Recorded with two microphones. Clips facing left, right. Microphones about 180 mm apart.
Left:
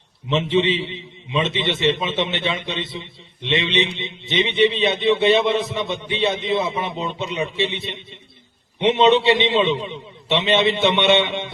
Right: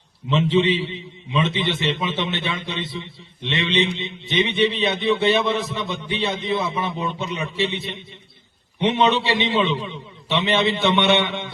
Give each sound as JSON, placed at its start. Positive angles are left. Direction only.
{"t": 0.3, "sound": "a man's voice", "side_deg": 20}